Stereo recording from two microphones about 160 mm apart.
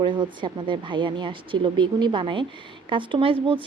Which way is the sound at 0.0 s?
30° right (ahead or behind).